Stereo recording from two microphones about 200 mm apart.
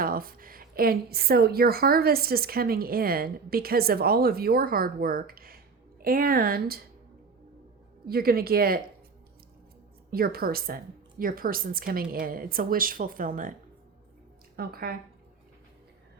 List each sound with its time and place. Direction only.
0.0 s a woman's voice: 45° right (ahead or behind)
8.0 s a woman's voice: 50° right (ahead or behind)
10.1 s a woman's voice: 50° right (ahead or behind)